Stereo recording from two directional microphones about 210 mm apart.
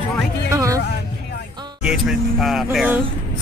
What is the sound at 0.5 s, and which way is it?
Speech, 15° right (ahead or behind).